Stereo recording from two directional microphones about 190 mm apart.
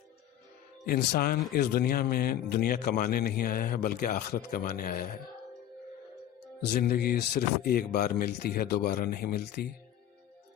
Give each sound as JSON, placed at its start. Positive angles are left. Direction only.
{"t": 0.9, "sound": "speech", "side_deg": 55}
{"t": 6.6, "sound": "speech", "side_deg": 55}